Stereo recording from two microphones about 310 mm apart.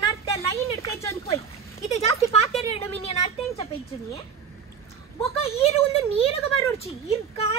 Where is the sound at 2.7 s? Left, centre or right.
Centre.